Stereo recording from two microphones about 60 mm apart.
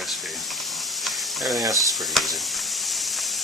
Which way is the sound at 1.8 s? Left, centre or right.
Centre.